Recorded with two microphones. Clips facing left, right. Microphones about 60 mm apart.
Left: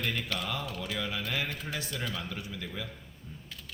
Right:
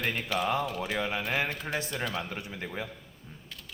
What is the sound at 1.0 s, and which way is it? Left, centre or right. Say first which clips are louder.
Speech: right 4 dB; right.